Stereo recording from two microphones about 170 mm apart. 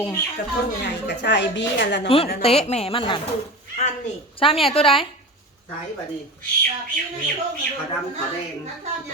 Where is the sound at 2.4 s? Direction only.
35° left (ahead or behind).